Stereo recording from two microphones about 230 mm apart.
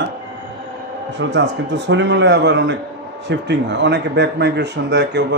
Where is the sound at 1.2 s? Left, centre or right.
Right.